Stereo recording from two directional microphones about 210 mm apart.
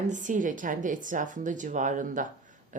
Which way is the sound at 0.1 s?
35° right (ahead or behind).